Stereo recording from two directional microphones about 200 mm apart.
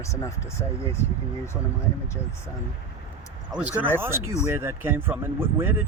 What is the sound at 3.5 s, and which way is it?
Speech, 5° right (ahead or behind).